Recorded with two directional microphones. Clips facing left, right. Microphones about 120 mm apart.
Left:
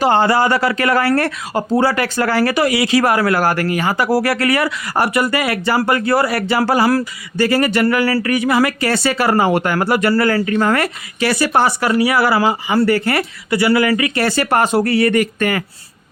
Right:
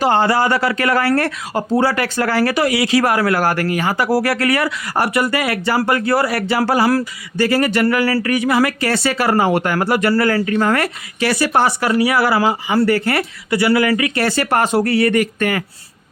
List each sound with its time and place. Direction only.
0.0 s speech: 25° left (ahead or behind)
11.2 s speech: 5° left (ahead or behind); by 15.6 s 40° left (ahead or behind)